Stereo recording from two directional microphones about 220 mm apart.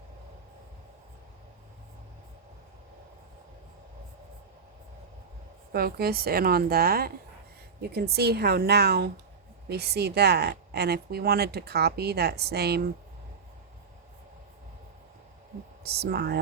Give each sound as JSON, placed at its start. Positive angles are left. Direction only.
{"t": 5.7, "sound": "speech", "side_deg": -45}
{"t": 8.1, "sound": "speech", "side_deg": -45}
{"t": 15.8, "sound": "speech", "side_deg": -45}